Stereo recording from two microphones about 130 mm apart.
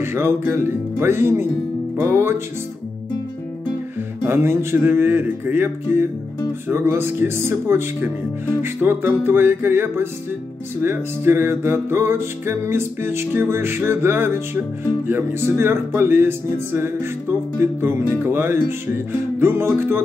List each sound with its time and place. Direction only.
0.0 s speech: 20° right (ahead or behind)
2.0 s music: 20° right (ahead or behind)
4.2 s music: 20° right (ahead or behind)
8.8 s speech: 15° right (ahead or behind)
10.8 s music: 15° right (ahead or behind)
17.6 s speech: 20° right (ahead or behind)